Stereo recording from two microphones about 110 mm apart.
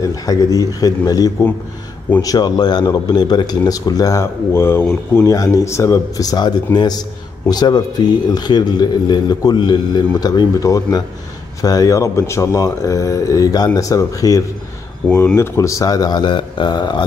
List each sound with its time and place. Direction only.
0.1 s speech: 35° left (ahead or behind)